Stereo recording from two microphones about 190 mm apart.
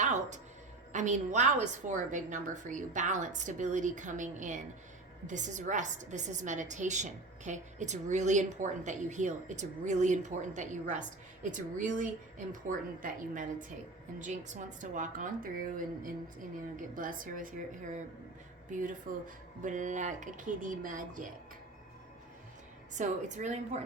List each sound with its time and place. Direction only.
0.0 s music: 40° right (ahead or behind)
0.9 s a woman's voice: 40° right (ahead or behind)
23.0 s a woman's voice: 40° right (ahead or behind)